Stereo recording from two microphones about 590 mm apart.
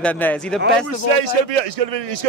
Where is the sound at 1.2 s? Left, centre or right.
Right.